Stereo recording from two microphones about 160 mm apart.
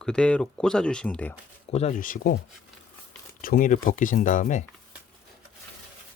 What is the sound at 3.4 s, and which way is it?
Speech, 60° left (ahead or behind).